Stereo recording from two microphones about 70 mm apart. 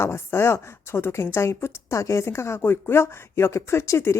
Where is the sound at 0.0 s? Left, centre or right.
Left.